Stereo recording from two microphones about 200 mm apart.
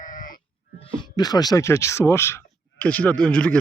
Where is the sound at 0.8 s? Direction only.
20° left (ahead or behind); by 3.6 s 5° left (ahead or behind).